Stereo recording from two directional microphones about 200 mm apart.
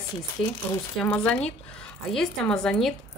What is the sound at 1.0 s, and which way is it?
A woman's voice, 5° left (ahead or behind).